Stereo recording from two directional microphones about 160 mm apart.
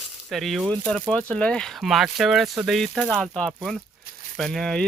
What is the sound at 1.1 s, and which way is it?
Speech, 5° left (ahead or behind).